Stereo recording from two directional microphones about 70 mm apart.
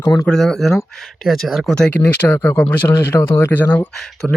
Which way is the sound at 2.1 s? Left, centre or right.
Left.